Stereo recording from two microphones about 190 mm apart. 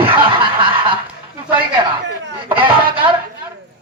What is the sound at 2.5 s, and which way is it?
Speech, 25° right (ahead or behind).